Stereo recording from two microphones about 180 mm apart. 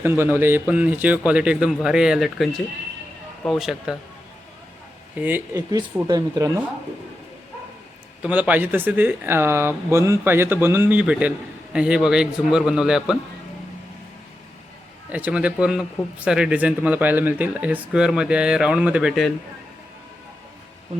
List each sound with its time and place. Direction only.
0.0 s speech: 10° right (ahead or behind)
5.2 s speech: 10° right (ahead or behind)
5.7 s speech: 20° right (ahead or behind)
8.2 s speech: 10° right (ahead or behind)
15.1 s speech: 5° right (ahead or behind)